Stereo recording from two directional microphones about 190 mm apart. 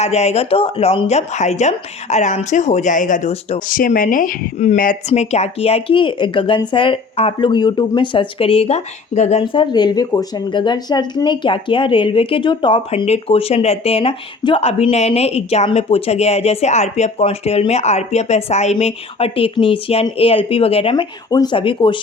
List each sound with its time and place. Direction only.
0.0 s speech: 35° left (ahead or behind)
9.4 s speech: 25° left (ahead or behind)